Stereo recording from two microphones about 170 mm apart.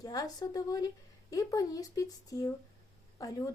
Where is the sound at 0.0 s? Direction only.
20° left (ahead or behind).